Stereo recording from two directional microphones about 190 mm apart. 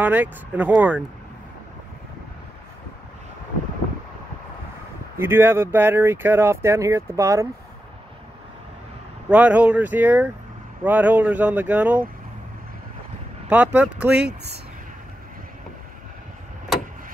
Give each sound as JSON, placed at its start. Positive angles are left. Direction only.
{"t": 0.0, "sound": "speech", "side_deg": -10}
{"t": 5.2, "sound": "speech", "side_deg": -10}
{"t": 9.3, "sound": "speech", "side_deg": -10}
{"t": 13.5, "sound": "speech", "side_deg": -10}
{"t": 14.1, "sound": "speech", "side_deg": -60}